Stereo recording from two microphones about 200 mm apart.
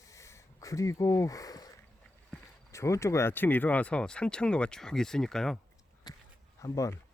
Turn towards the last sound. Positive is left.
turn(degrees=15)  # may be behind; listen again after turning